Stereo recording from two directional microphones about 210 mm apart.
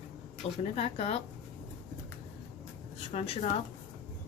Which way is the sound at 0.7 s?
30° left (ahead or behind).